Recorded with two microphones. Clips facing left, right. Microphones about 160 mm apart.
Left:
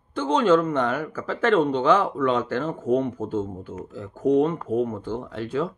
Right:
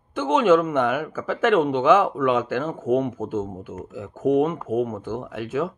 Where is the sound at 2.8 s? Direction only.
20° right (ahead or behind).